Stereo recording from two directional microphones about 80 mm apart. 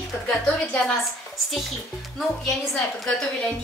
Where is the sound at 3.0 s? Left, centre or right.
Centre.